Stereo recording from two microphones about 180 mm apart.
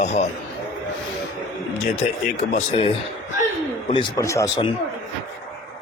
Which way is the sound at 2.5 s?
35° left (ahead or behind).